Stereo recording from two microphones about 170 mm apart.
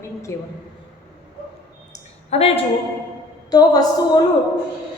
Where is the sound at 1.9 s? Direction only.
35° left (ahead or behind).